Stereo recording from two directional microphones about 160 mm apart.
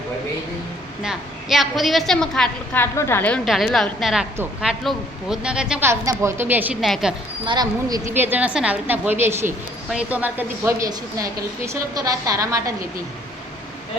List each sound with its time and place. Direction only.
1.0 s a woman's voice: centre (ahead or behind)
2.8 s a woman's voice: 15° left (ahead or behind)
3.4 s a woman's voice: centre (ahead or behind)
5.9 s a woman's voice: 15° right (ahead or behind)
6.8 s a woman's voice: centre (ahead or behind)
7.4 s a woman's voice: 25° right (ahead or behind)
8.1 s a woman's voice: 10° right (ahead or behind)